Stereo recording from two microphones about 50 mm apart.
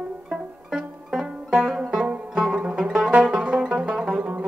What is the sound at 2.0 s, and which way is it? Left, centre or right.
Music, right.